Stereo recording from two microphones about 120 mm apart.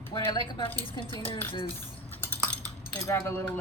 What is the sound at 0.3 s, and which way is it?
Speech, 40° left (ahead or behind).